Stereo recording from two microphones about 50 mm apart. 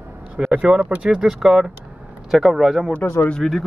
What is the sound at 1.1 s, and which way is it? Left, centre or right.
Speech, centre.